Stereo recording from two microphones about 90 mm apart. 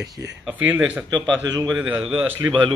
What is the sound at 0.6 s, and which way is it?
Speech, 15° right (ahead or behind).